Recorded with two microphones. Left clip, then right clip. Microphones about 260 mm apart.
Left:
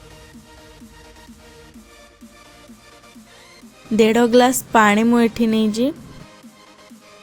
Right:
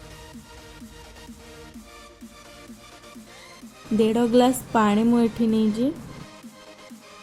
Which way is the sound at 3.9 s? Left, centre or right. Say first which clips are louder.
Left 6 dB; left.